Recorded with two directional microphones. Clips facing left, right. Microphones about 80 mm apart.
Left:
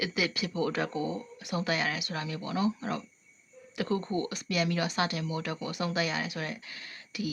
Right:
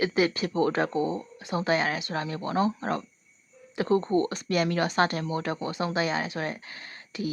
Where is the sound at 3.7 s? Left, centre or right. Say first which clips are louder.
Right 7 dB; right.